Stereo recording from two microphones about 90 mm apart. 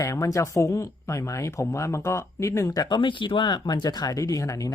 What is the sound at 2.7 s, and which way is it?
Speech, 50° left (ahead or behind).